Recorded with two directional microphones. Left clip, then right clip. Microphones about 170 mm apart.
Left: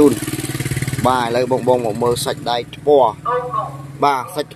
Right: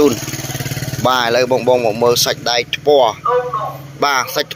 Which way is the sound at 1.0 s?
5° left (ahead or behind).